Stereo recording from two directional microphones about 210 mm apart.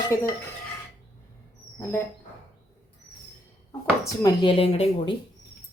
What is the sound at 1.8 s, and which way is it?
Speech, 10° left (ahead or behind).